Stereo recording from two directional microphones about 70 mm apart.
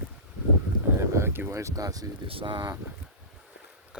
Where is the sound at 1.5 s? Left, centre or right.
Right.